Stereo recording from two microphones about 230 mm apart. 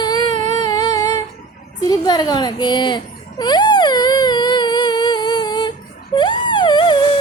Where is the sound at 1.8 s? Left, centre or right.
Centre.